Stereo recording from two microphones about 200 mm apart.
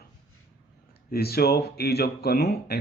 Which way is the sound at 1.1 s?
50° left (ahead or behind).